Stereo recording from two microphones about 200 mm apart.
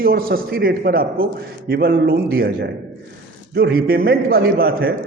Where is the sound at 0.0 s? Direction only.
50° right (ahead or behind).